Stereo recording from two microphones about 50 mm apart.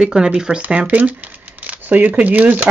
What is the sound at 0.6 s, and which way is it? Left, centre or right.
Speech, right.